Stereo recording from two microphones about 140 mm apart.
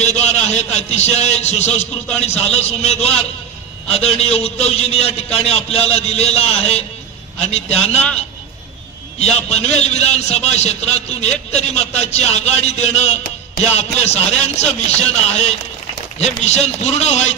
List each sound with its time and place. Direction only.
0.0 s a man's voice: 50° left (ahead or behind)
9.2 s a man's voice: 50° left (ahead or behind)